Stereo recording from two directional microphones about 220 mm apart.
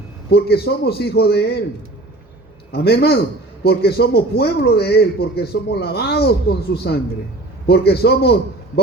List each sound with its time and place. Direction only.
0.3 s a man's voice: 45° left (ahead or behind)
2.7 s a man's voice: 45° left (ahead or behind)